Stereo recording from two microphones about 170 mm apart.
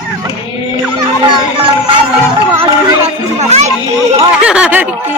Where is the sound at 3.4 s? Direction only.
40° right (ahead or behind).